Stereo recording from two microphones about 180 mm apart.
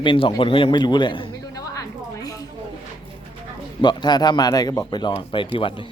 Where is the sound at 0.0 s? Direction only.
30° left (ahead or behind).